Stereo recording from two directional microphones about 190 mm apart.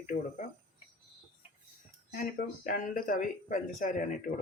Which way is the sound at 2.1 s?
45° left (ahead or behind).